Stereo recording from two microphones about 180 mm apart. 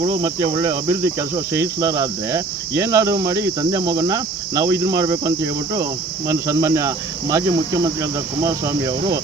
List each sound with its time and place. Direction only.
0.0 s cricket: 20° right (ahead or behind)
5.7 s speech: 15° right (ahead or behind)
8.4 s cricket: 20° right (ahead or behind)